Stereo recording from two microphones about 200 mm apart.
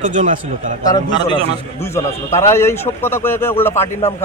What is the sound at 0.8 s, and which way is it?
A man's voice, 20° left (ahead or behind).